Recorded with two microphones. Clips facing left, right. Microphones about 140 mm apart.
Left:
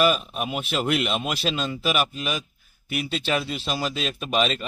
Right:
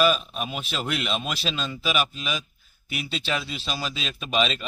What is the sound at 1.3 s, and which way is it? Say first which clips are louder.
Speech: left 3 dB; 55° left (ahead or behind).